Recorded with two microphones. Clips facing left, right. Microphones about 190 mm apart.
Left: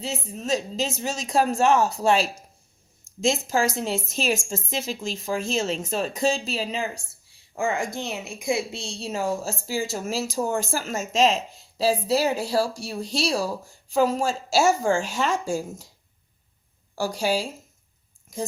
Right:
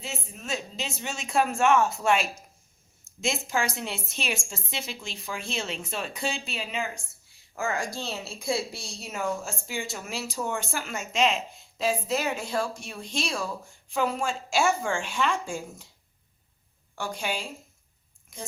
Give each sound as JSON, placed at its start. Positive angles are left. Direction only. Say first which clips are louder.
{"t": 0.0, "sound": "speech", "louder": "left 7 dB", "side_deg": 35}
{"t": 3.8, "sound": "speech", "louder": "left 7 dB", "side_deg": 40}
{"t": 16.9, "sound": "speech", "louder": "left 8 dB", "side_deg": 40}